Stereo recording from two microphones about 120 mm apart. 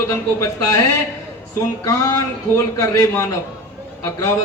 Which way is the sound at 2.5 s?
25° left (ahead or behind).